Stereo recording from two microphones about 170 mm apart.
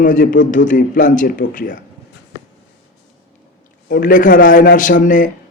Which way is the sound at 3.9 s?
55° left (ahead or behind).